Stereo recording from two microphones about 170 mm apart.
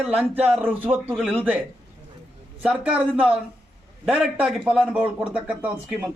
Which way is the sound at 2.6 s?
5° right (ahead or behind).